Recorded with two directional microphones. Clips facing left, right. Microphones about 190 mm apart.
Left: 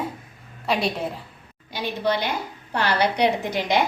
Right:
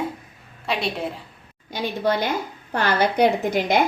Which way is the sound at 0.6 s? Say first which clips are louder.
Left 2 dB; centre (ahead or behind).